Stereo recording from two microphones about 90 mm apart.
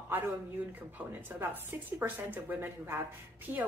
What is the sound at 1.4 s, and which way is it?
A woman's voice, 25° right (ahead or behind).